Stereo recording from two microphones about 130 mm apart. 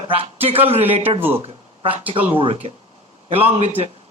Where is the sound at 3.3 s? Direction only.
50° right (ahead or behind).